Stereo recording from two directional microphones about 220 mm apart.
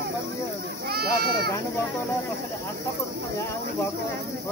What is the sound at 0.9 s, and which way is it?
Speech, 45° right (ahead or behind).